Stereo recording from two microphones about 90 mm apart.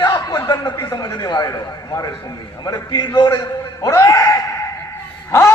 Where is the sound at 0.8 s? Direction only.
40° left (ahead or behind).